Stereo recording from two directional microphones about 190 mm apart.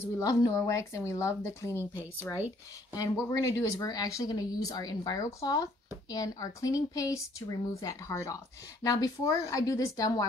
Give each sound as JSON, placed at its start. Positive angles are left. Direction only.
{"t": 0.0, "sound": "a woman's voice", "side_deg": 20}